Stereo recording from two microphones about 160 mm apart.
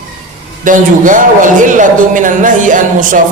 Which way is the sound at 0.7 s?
55° right (ahead or behind).